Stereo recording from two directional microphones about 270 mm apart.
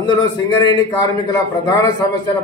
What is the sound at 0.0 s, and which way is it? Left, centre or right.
A man's voice, centre.